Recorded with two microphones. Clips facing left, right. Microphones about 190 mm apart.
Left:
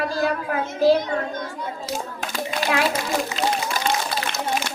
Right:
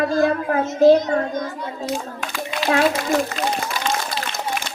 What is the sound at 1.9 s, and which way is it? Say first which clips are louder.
Hands: right 1 dB; 40° left (ahead or behind).